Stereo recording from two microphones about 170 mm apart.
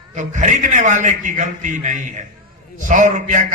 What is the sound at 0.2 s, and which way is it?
A man's voice, 45° right (ahead or behind).